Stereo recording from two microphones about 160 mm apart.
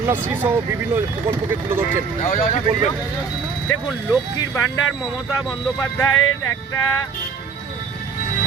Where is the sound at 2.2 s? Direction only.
45° left (ahead or behind).